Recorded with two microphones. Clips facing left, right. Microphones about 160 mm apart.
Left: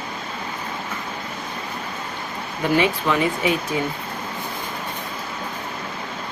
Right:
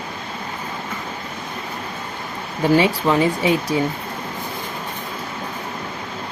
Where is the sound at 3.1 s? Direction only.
35° right (ahead or behind).